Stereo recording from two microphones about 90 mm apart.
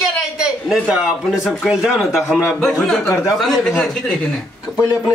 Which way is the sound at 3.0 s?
35° left (ahead or behind).